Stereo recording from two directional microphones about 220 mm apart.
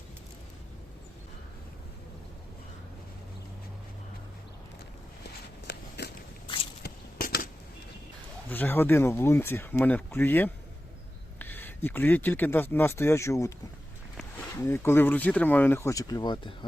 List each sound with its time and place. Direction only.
5.2 s a sound: 50° left (ahead or behind)
8.4 s speech: 10° left (ahead or behind)
14.7 s speech: 10° left (ahead or behind)